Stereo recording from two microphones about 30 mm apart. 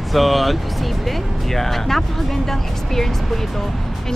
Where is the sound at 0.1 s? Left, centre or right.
Centre.